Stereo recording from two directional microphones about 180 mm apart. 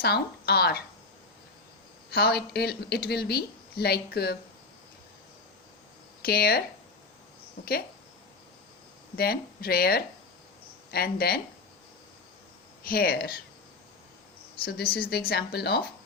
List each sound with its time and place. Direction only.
0.0 s speech: 60° left (ahead or behind)
2.0 s speech: 60° left (ahead or behind)
6.2 s speech: 55° left (ahead or behind)
7.6 s speech: 55° left (ahead or behind)
9.1 s speech: 55° left (ahead or behind)
12.8 s speech: 55° left (ahead or behind)
14.6 s speech: 60° left (ahead or behind)